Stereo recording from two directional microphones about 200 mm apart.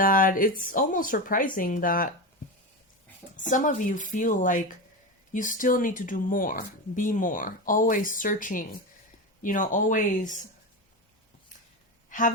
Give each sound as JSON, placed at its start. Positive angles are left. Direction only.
{"t": 0.0, "sound": "speech", "side_deg": 45}
{"t": 3.5, "sound": "speech", "side_deg": 40}
{"t": 12.1, "sound": "speech", "side_deg": 40}